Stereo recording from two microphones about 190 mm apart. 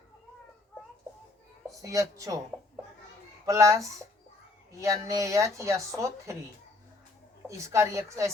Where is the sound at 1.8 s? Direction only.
20° right (ahead or behind).